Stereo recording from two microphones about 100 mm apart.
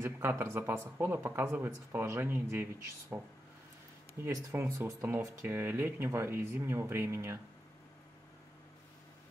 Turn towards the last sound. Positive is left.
turn(degrees=-25)  # may be behind; listen again after turning